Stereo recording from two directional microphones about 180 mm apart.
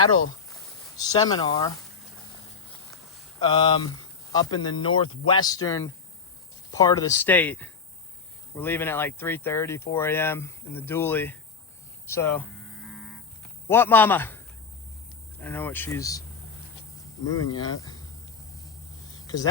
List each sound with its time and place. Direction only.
0.9 s speech: 20° left (ahead or behind)
3.4 s speech: 25° left (ahead or behind)
12.5 s livestock: centre (ahead or behind)
13.7 s speech: 10° left (ahead or behind)
15.4 s speech: 10° left (ahead or behind)
17.4 s speech: 20° left (ahead or behind)